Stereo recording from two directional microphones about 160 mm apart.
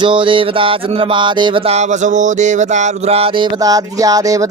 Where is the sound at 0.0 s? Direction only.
30° right (ahead or behind).